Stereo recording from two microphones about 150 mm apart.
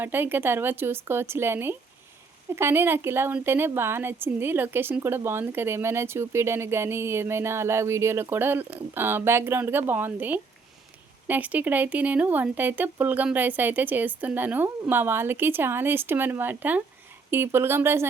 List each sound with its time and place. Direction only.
0.0 s a woman's voice: 15° right (ahead or behind)